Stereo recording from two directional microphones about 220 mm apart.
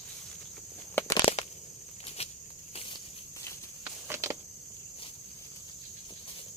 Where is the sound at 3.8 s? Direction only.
10° right (ahead or behind).